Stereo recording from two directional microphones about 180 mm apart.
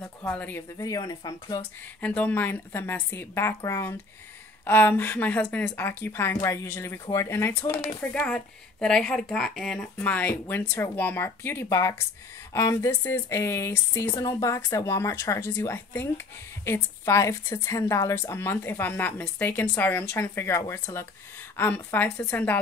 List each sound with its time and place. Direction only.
0.0 s a woman's voice: 10° left (ahead or behind)
2.0 s a woman's voice: 10° left (ahead or behind)